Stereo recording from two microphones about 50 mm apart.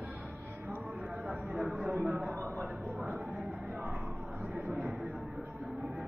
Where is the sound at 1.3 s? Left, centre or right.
Centre.